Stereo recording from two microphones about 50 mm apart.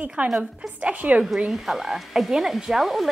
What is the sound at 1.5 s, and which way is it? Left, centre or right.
Speech, centre.